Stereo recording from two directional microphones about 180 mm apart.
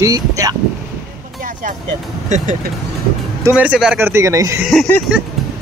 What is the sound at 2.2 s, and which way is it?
Speech, 40° right (ahead or behind).